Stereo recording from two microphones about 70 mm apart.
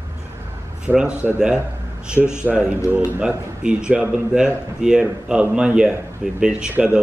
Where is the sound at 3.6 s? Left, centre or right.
Centre.